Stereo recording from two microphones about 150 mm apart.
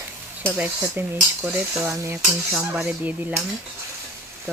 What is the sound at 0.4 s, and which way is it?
Speech, 10° right (ahead or behind).